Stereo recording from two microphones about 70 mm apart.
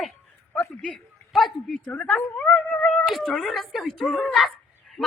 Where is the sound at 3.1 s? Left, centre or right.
Centre.